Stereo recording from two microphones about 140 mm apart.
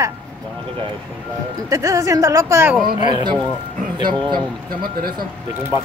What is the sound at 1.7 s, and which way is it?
Speech, 25° right (ahead or behind).